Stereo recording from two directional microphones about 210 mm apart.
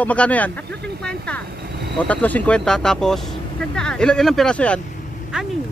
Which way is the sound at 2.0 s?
5° left (ahead or behind).